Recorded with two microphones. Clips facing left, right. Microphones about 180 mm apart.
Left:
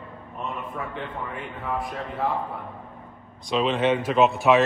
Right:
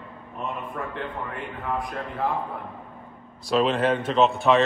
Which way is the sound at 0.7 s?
Centre (ahead or behind).